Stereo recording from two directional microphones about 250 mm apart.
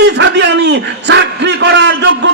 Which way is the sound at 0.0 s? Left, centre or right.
Right.